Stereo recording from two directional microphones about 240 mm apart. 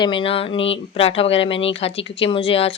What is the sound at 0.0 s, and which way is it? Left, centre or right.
Speech, left.